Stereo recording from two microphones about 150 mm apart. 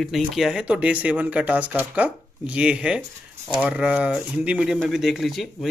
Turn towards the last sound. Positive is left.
turn(degrees=0)  # may be behind; listen again after turning